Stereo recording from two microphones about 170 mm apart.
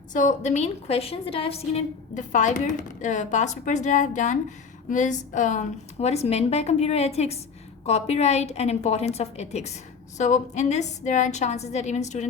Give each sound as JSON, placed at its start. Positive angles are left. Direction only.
{"t": 0.1, "sound": "a woman's voice", "side_deg": 50}